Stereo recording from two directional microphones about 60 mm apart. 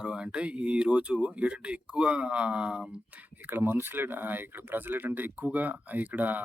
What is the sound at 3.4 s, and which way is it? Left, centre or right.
Speech, right.